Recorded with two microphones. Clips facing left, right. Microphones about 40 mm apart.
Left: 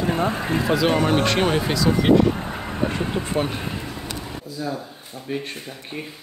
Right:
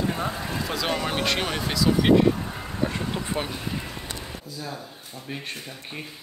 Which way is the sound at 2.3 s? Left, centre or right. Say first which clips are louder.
Left 4 dB; left.